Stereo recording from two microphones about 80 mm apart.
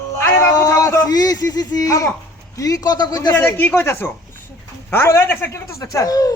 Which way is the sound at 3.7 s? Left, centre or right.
Left.